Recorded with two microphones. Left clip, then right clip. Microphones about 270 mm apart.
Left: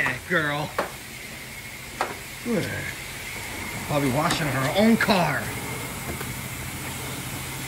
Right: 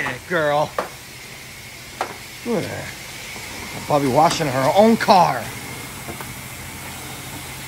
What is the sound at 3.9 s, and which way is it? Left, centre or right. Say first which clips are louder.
Speech: right 8 dB; centre.